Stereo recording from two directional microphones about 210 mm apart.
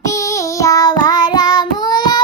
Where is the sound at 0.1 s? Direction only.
15° left (ahead or behind).